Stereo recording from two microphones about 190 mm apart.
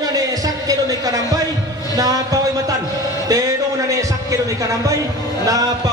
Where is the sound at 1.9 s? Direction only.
20° right (ahead or behind).